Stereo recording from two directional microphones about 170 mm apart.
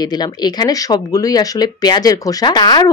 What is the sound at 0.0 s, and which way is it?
Speech, 25° left (ahead or behind).